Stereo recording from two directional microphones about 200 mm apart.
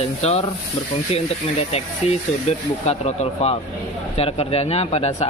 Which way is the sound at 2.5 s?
30° left (ahead or behind).